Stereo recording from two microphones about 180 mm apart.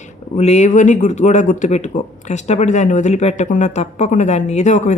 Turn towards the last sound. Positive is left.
turn(degrees=45)  # may be behind; listen again after turning